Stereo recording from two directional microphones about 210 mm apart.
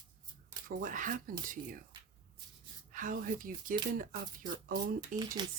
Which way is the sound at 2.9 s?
40° right (ahead or behind).